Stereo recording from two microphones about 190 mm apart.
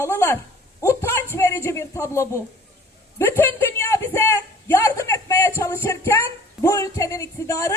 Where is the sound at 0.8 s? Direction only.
10° left (ahead or behind).